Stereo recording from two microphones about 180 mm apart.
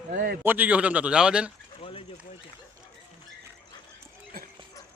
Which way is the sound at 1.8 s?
30° left (ahead or behind).